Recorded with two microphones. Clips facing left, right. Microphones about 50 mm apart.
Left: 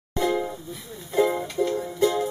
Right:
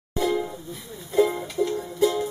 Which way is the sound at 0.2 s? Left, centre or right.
Centre.